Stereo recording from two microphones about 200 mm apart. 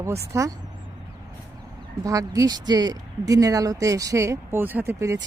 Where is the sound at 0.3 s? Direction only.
15° right (ahead or behind).